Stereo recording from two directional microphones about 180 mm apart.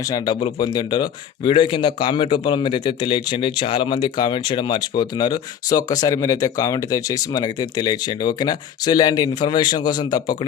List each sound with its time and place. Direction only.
0.0 s speech: 20° left (ahead or behind)